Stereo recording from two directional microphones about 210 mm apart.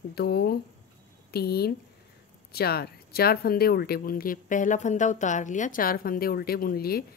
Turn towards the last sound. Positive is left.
turn(degrees=45)  # may be behind; listen again after turning